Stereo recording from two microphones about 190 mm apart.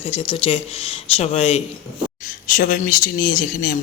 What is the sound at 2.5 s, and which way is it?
Speech, 45° left (ahead or behind).